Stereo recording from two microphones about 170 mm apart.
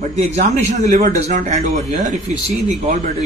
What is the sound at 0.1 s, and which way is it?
A man's voice, 40° right (ahead or behind).